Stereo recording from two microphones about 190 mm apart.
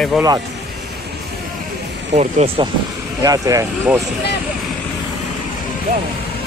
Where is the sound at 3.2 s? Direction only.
15° right (ahead or behind).